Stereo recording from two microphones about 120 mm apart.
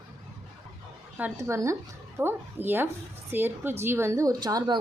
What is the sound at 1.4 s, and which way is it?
Speech, 25° right (ahead or behind).